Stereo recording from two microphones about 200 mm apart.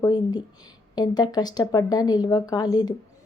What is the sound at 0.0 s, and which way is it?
Speech, 20° left (ahead or behind).